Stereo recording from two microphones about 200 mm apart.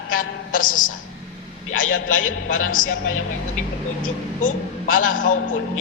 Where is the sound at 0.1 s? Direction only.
40° left (ahead or behind).